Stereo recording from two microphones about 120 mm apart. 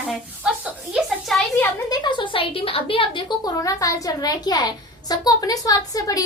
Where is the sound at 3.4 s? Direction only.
30° left (ahead or behind).